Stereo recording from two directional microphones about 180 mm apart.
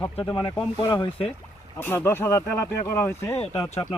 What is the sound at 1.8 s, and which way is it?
Speech, 10° left (ahead or behind).